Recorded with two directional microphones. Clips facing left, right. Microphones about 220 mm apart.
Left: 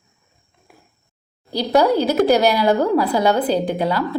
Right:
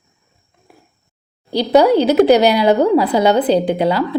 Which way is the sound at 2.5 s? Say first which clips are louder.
Right 4 dB; 20° right (ahead or behind).